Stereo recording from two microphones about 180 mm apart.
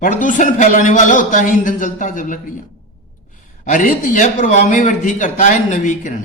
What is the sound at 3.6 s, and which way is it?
Speech, 45° left (ahead or behind).